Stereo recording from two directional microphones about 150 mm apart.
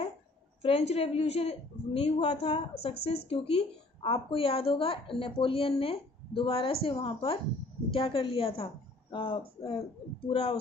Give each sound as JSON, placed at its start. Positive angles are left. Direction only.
{"t": 0.6, "sound": "a woman's voice", "side_deg": 40}